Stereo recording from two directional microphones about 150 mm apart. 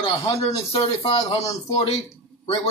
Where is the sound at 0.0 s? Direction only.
40° left (ahead or behind).